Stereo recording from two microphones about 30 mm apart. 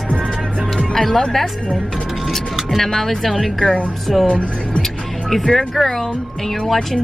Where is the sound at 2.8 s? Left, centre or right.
Centre.